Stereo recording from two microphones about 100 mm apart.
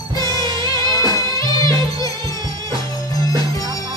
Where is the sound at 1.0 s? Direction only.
40° left (ahead or behind).